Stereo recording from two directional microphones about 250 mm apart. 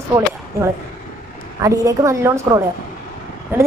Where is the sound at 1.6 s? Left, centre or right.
Centre.